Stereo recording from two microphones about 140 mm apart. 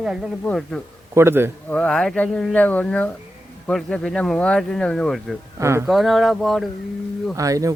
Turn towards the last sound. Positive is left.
turn(degrees=-25)  # may be behind; listen again after turning